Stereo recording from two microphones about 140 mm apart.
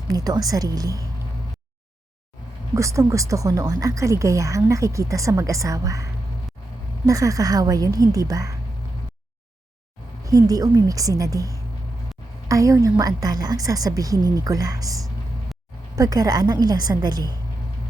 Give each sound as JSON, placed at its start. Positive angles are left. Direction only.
{"t": 0.1, "sound": "speech", "side_deg": -25}
{"t": 2.7, "sound": "speech", "side_deg": -20}
{"t": 10.2, "sound": "speech", "side_deg": -25}